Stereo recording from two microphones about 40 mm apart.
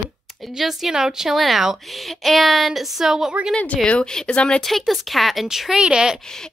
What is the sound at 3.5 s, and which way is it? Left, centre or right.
Speech, left.